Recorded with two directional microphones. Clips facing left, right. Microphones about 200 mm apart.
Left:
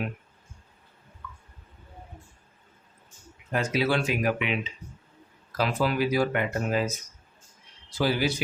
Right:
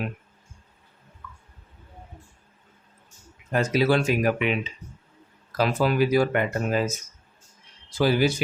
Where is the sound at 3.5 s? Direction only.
40° right (ahead or behind).